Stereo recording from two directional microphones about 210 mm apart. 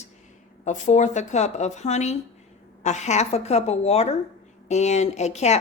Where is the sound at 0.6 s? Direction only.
35° left (ahead or behind).